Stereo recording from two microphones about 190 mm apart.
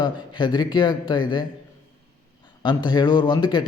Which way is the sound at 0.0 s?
25° left (ahead or behind).